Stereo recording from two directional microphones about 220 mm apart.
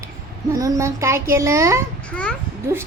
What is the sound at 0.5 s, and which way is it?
A child's voice, 15° right (ahead or behind).